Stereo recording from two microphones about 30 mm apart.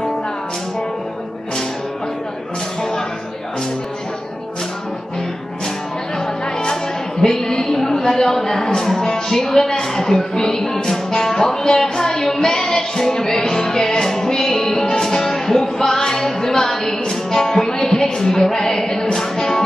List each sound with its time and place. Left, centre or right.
2.8 s a sound: centre
6.1 s music: left
6.7 s speech: centre
12.4 s music: centre